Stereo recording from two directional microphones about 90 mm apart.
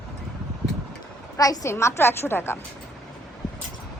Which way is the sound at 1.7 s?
30° left (ahead or behind).